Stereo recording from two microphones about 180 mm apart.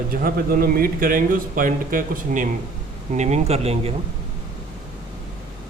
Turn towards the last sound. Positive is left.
turn(degrees=-35)  # may be behind; listen again after turning